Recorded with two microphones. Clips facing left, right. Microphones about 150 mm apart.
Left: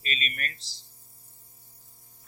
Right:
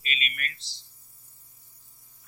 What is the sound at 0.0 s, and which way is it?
Speech, 40° left (ahead or behind).